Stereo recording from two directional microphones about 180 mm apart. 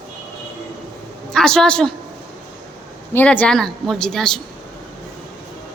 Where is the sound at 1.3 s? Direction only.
5° left (ahead or behind).